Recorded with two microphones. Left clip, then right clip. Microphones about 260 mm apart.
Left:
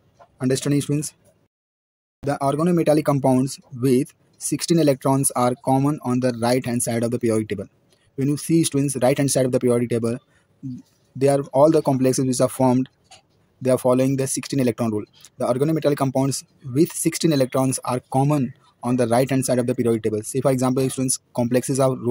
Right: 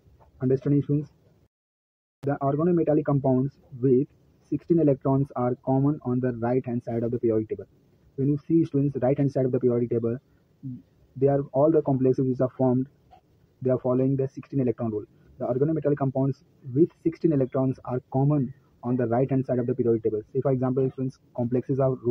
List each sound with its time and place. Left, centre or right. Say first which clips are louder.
0.4 s speech: left 3 dB; left
2.2 s speech: left 4 dB; left